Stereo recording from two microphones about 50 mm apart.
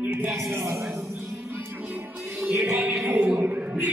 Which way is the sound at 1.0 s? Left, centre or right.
Right.